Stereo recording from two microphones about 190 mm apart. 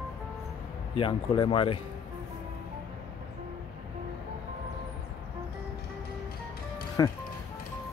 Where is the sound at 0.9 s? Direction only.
25° left (ahead or behind).